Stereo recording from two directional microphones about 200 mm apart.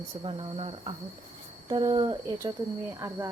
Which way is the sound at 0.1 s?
25° right (ahead or behind).